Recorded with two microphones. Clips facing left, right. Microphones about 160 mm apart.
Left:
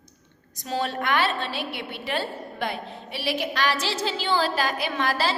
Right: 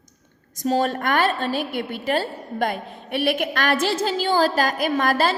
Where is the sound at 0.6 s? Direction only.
45° right (ahead or behind).